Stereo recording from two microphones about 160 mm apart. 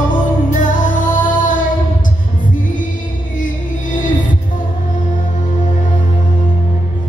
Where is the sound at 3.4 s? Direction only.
55° left (ahead or behind).